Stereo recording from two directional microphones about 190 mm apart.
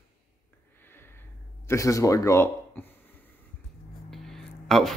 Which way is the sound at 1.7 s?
15° left (ahead or behind).